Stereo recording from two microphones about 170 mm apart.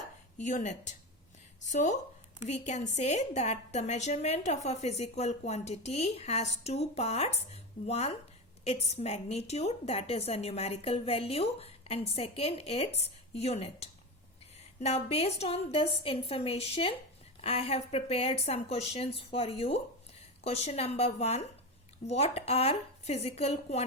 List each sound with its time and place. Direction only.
0.3 s a woman's voice: 45° left (ahead or behind)